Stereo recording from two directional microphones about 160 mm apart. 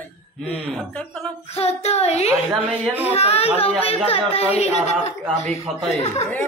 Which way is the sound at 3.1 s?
40° left (ahead or behind).